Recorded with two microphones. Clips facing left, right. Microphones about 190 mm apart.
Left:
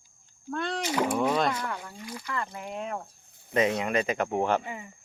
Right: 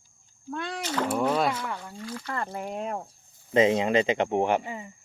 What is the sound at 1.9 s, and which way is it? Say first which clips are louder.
Speech: right 3 dB; 15° left (ahead or behind).